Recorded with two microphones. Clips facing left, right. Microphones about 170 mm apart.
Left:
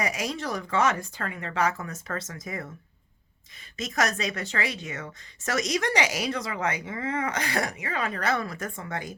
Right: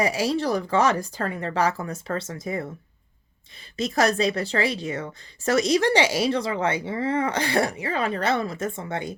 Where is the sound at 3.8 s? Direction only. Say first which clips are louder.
Right 6 dB; 30° right (ahead or behind).